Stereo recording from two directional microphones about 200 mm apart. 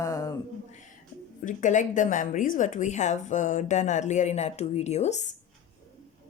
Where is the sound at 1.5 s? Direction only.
40° left (ahead or behind).